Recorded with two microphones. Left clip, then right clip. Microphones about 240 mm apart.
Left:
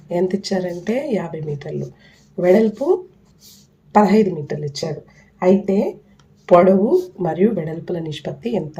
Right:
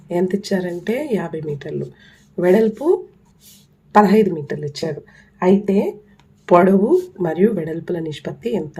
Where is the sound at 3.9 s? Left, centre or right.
Right.